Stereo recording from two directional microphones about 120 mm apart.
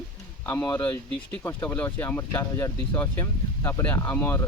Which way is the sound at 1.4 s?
20° left (ahead or behind).